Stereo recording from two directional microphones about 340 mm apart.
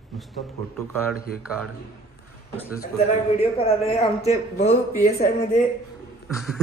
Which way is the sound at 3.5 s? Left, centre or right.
Centre.